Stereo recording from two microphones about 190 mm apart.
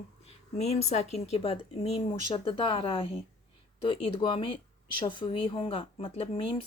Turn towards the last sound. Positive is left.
turn(degrees=30)  # may be behind; listen again after turning